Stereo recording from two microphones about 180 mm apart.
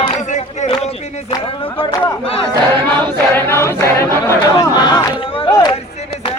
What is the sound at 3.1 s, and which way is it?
Choir, 15° left (ahead or behind).